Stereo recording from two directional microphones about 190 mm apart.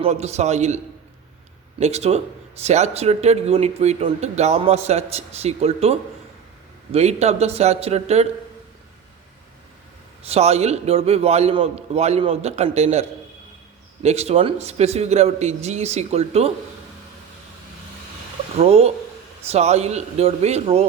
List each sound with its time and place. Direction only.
0.0 s speech: 35° right (ahead or behind)
1.8 s speech: 35° right (ahead or behind)
10.2 s speech: 35° right (ahead or behind)
18.5 s speech: 30° right (ahead or behind)